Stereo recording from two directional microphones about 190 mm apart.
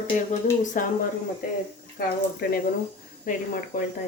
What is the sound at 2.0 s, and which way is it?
Speech, 50° left (ahead or behind).